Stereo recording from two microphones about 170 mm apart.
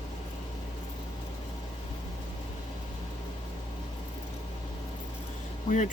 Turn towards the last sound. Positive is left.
turn(degrees=45)  # may be behind; listen again after turning